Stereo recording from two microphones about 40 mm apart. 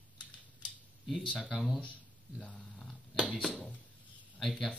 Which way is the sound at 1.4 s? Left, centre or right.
Centre.